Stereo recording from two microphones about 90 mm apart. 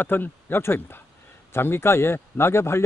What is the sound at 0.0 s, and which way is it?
Speech, 20° left (ahead or behind).